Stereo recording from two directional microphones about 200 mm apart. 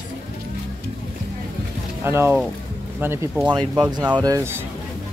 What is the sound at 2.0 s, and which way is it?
Speech, 10° right (ahead or behind).